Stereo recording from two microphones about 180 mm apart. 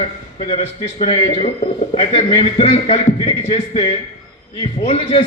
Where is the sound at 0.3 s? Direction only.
35° left (ahead or behind).